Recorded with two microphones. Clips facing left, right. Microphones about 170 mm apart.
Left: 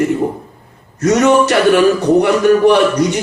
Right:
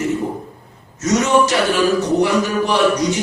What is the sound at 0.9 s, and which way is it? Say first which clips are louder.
Speech: left 5 dB; 60° left (ahead or behind).